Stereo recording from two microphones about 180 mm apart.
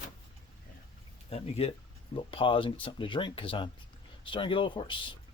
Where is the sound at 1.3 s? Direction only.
35° left (ahead or behind).